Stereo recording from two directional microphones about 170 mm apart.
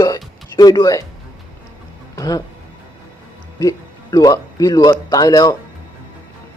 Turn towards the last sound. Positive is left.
turn(degrees=25)  # may be behind; listen again after turning